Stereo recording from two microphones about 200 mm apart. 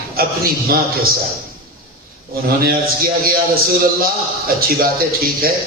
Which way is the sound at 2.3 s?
50° right (ahead or behind).